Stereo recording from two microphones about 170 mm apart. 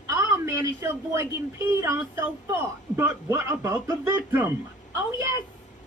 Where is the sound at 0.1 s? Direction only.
15° right (ahead or behind).